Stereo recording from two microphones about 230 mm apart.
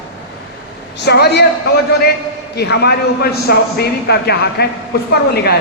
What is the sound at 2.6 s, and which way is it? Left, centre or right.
A man's voice, left.